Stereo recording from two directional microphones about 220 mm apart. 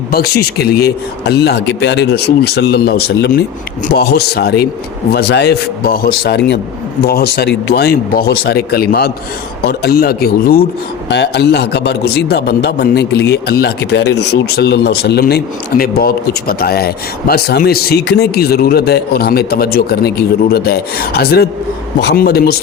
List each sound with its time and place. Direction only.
0.1 s speech: 45° left (ahead or behind)